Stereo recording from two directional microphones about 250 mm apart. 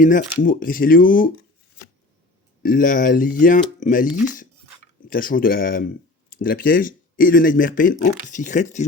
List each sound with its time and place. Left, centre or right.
0.0 s speech: left
2.6 s speech: left
5.0 s speech: left